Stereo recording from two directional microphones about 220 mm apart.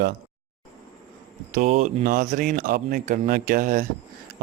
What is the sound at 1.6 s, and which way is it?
Speech, 30° right (ahead or behind).